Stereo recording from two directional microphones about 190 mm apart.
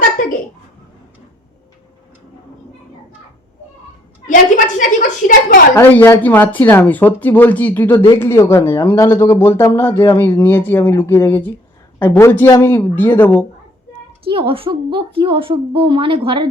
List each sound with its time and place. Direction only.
4.3 s a woman's voice: 45° left (ahead or behind)
5.7 s speech: 10° left (ahead or behind)
14.3 s a woman's voice: 30° right (ahead or behind)